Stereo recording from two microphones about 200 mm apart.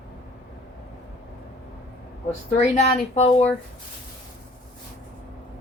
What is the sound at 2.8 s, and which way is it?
Speech, 35° left (ahead or behind).